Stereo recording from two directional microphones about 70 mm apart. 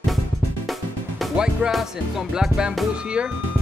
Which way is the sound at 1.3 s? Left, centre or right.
Centre.